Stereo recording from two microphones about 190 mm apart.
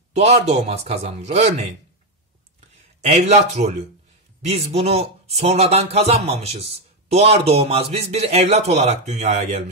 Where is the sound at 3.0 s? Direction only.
40° right (ahead or behind).